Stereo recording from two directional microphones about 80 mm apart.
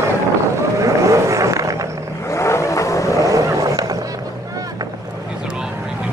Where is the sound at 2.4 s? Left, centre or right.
Left.